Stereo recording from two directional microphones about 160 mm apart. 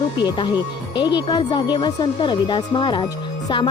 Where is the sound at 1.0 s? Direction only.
30° left (ahead or behind).